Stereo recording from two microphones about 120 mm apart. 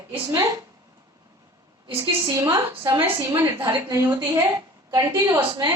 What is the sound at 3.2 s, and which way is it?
Speech, 30° right (ahead or behind).